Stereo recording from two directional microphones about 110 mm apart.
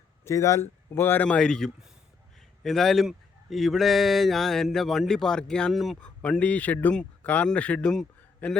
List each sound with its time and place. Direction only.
0.3 s speech: 25° left (ahead or behind); by 6.1 s centre (ahead or behind)
6.2 s speech: 10° left (ahead or behind)